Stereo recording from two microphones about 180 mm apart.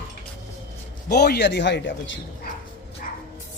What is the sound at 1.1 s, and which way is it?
Speech, 65° left (ahead or behind).